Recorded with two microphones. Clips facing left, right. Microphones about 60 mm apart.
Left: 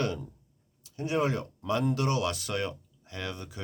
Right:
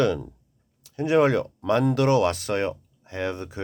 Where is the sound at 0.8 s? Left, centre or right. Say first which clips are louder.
Right 9 dB; right.